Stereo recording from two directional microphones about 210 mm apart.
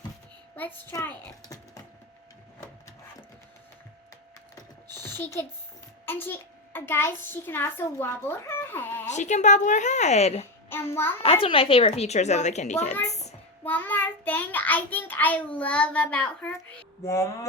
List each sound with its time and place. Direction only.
0.5 s child singing: 10° left (ahead or behind)
5.1 s child singing: 10° left (ahead or behind)
6.1 s a child's voice: 10° left (ahead or behind)
9.0 s a child's voice: 35° left (ahead or behind)
10.9 s child singing: 10° left (ahead or behind)
11.2 s a child's voice: 25° left (ahead or behind)
13.1 s child singing: 30° left (ahead or behind)
13.7 s child singing: 10° left (ahead or behind)